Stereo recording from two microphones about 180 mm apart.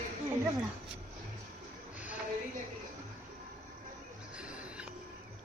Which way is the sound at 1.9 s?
10° right (ahead or behind).